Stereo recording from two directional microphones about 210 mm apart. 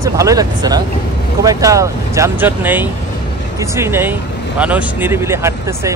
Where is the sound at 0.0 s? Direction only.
15° right (ahead or behind).